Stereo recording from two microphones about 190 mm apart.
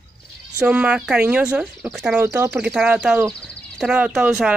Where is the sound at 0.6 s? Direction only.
5° right (ahead or behind).